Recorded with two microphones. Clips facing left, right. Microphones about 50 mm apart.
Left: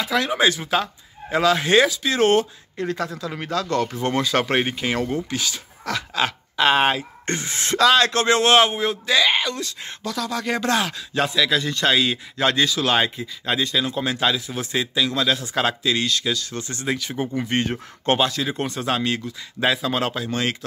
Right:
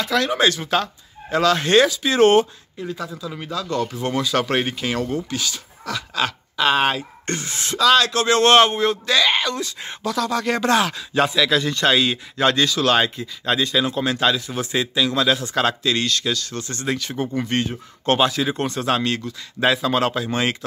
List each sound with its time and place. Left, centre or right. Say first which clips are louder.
0.0 s speech: right 1 dB; centre
2.0 s speech: right 3 dB; centre
2.8 s speech: left 3 dB; left
3.3 s speech: left 1 dB; left
8.4 s speech: right 4 dB; centre
9.6 s speech: right 3 dB; centre
13.7 s speech: right 3 dB; centre
13.9 s speech: right 2 dB; centre
16.5 s speech: right 1 dB; left
16.8 s speech: right 1 dB; centre
18.2 s speech: right 3 dB; centre
20.2 s speech: right 2 dB; centre